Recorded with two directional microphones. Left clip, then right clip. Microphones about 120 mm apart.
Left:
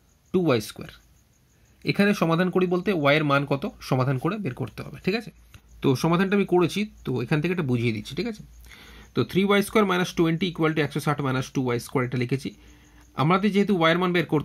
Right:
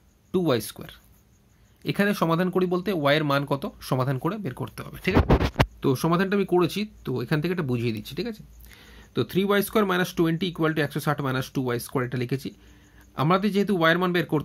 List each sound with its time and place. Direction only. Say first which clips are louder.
0.3 s speech: left 1 dB; 25° left (ahead or behind)